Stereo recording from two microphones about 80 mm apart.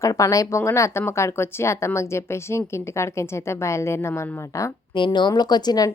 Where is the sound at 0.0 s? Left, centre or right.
Left.